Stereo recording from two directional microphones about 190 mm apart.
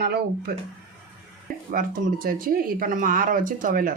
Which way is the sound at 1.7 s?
45° right (ahead or behind).